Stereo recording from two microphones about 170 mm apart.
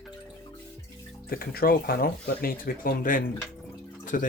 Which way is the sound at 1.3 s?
60° left (ahead or behind).